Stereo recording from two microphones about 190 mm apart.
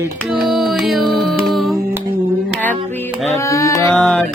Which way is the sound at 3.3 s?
15° left (ahead or behind).